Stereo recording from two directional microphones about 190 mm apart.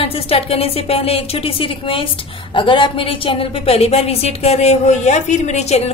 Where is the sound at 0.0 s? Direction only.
30° left (ahead or behind).